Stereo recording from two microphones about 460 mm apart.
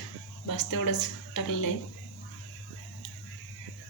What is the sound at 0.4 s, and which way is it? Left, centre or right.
Speech, left.